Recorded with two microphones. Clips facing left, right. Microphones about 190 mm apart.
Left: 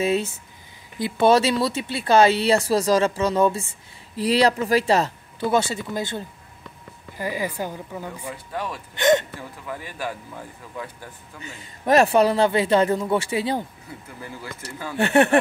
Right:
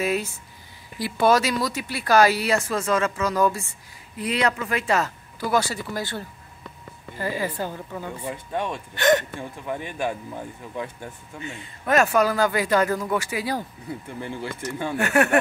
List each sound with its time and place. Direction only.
0.0 s a woman's voice: 25° left (ahead or behind)
8.3 s speech: 25° right (ahead or behind)
8.9 s speech: 20° left (ahead or behind)
9.4 s speech: 25° right (ahead or behind)
11.4 s speech: 35° left (ahead or behind)
14.0 s speech: 25° right (ahead or behind)
15.0 s speech: 30° left (ahead or behind)